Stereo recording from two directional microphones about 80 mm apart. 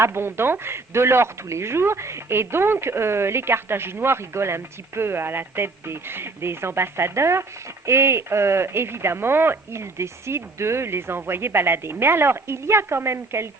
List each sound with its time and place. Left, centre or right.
0.0 s speech: right